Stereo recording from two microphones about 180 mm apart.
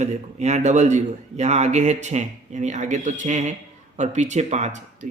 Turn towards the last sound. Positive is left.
turn(degrees=-40)  # may be behind; listen again after turning